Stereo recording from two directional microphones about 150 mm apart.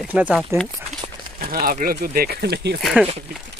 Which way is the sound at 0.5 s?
20° right (ahead or behind).